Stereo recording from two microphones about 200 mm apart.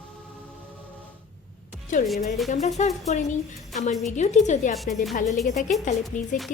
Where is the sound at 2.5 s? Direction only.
35° left (ahead or behind).